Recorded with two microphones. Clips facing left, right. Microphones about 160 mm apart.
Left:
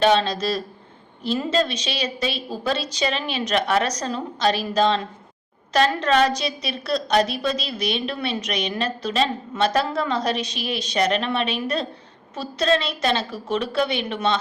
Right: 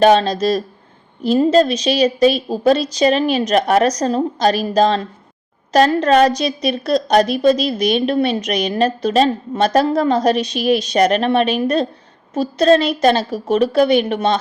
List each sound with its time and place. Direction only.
0.0 s a woman's voice: 45° right (ahead or behind)